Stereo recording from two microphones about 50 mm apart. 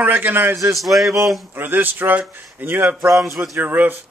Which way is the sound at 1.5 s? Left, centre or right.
Right.